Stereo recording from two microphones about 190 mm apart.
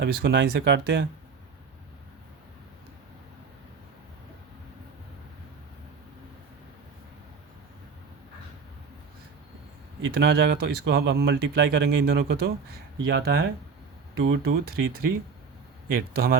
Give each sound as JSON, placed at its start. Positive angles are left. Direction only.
{"t": 0.0, "sound": "speech", "side_deg": -65}
{"t": 10.2, "sound": "speech", "side_deg": -65}